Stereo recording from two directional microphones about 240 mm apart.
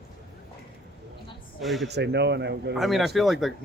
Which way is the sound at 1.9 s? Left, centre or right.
Right.